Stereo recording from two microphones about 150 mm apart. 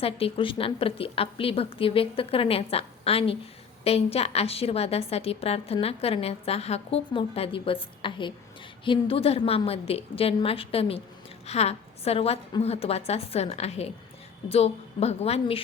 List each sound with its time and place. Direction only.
0.0 s a woman's voice: 40° left (ahead or behind)